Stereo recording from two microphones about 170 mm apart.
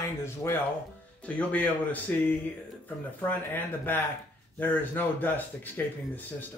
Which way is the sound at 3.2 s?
10° left (ahead or behind).